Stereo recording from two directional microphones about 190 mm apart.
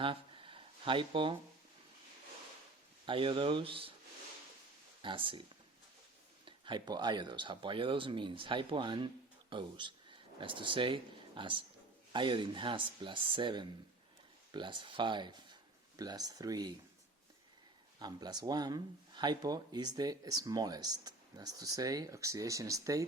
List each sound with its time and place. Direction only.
0.0 s a sound: 25° right (ahead or behind)
3.1 s speech: 25° right (ahead or behind)
5.0 s speech: 25° right (ahead or behind)
6.4 s speech: 25° right (ahead or behind)
18.0 s speech: 20° right (ahead or behind)